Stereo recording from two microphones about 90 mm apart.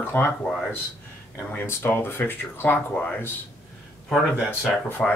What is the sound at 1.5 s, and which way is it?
Speech, 25° left (ahead or behind).